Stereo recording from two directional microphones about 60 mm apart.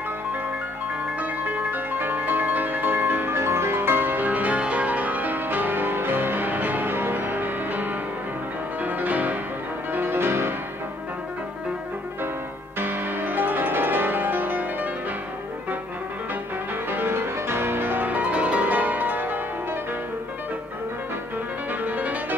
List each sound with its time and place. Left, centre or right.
1.2 s music: right
9.9 s music: right
12.7 s music: right
16.9 s music: right
21.8 s music: right